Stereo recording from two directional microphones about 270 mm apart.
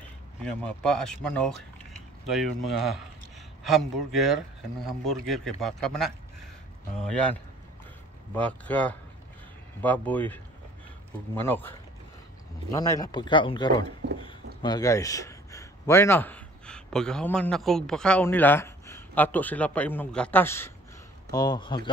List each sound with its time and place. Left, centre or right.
0.4 s speech: centre
8.4 s speech: centre
12.7 s a man's voice: centre